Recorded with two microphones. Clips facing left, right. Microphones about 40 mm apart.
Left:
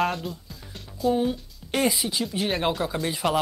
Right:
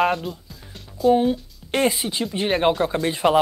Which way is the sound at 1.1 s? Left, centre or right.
Right.